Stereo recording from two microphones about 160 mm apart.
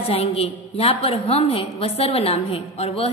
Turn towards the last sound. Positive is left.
turn(degrees=40)  # may be behind; listen again after turning